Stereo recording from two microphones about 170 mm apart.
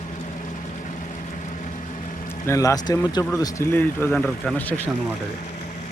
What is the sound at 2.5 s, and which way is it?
Speech, 20° left (ahead or behind).